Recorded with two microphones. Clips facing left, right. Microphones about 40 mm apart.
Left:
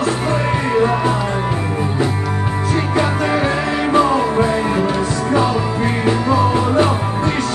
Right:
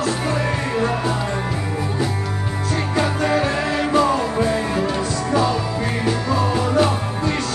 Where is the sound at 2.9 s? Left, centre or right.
Centre.